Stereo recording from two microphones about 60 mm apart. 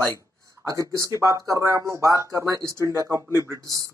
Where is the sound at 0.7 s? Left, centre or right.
Right.